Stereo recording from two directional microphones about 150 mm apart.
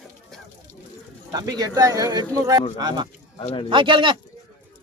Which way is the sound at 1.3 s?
25° right (ahead or behind).